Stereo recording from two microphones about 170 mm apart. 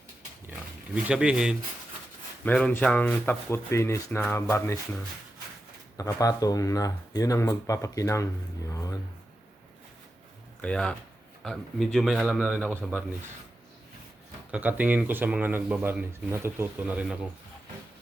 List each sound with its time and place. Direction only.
1.0 s speech: 5° right (ahead or behind)
2.4 s speech: 5° left (ahead or behind)
6.0 s speech: 20° left (ahead or behind)
8.7 s a sound: 20° left (ahead or behind)
10.6 s speech: 5° left (ahead or behind)
14.5 s speech: 10° right (ahead or behind)